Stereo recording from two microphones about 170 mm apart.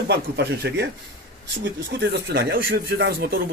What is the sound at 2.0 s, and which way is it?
Speech, 75° right (ahead or behind).